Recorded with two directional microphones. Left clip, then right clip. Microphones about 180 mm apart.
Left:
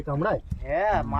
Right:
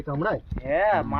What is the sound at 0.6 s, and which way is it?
Speech, 40° right (ahead or behind).